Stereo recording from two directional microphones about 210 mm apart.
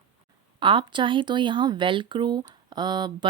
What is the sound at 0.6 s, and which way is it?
Speech, 25° right (ahead or behind).